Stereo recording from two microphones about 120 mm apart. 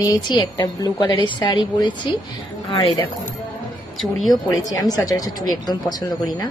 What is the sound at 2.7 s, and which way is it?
Speech, 45° left (ahead or behind).